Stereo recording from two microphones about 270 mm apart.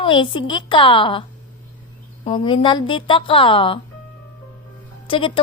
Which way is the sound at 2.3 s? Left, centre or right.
Centre.